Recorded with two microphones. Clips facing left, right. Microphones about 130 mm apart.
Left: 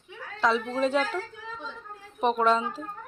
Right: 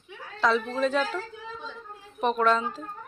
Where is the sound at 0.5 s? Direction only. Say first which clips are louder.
Even; 20° left (ahead or behind).